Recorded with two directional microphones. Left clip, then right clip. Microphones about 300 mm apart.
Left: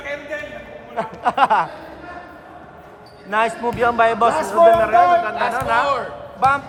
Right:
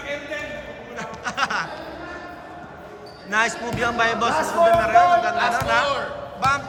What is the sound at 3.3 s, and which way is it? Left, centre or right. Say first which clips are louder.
A man's voice: left 3 dB; centre.